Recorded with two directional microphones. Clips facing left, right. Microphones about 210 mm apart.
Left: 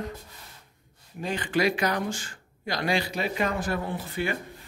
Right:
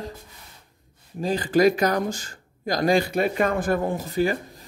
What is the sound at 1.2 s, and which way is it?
Speech, 35° right (ahead or behind).